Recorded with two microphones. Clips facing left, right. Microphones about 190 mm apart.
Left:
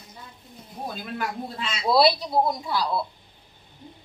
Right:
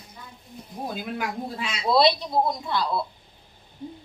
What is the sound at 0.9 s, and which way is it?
Speech, 10° right (ahead or behind).